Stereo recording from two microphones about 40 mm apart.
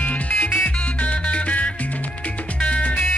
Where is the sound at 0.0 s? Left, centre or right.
Left.